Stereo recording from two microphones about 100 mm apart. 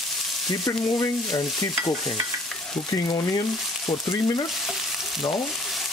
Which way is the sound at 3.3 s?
40° left (ahead or behind).